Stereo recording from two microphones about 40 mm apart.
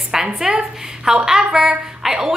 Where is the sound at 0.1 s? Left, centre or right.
Centre.